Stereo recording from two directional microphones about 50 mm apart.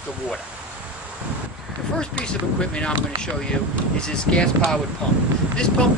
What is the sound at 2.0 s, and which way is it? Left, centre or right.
Speech, centre.